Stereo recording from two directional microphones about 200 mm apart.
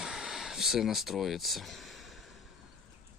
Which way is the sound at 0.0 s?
Centre (ahead or behind).